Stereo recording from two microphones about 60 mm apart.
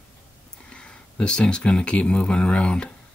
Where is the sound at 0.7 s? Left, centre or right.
Centre.